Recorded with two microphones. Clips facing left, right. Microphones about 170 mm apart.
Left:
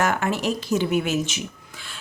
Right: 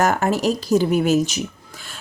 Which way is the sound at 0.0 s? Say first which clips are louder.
Right 4 dB; 40° right (ahead or behind).